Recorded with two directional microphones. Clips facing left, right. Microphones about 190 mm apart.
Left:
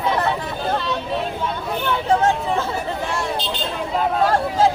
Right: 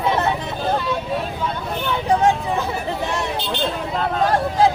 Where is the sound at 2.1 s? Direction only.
15° right (ahead or behind).